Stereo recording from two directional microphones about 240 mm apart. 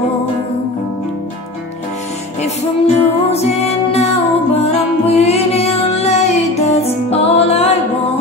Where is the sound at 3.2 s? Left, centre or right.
Left.